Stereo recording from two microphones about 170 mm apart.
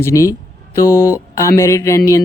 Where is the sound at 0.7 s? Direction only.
15° left (ahead or behind).